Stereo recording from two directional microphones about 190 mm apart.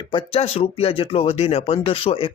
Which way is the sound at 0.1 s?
30° left (ahead or behind).